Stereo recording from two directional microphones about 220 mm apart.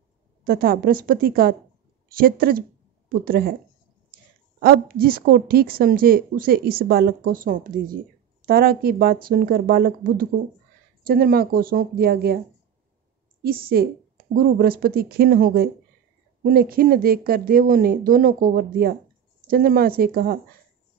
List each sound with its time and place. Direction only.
0.4 s a woman's voice: 40° right (ahead or behind)
4.6 s a woman's voice: 40° right (ahead or behind)
13.4 s a woman's voice: 45° right (ahead or behind)